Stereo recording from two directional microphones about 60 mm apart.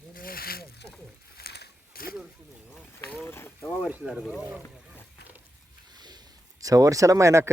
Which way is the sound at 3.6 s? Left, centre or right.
Centre.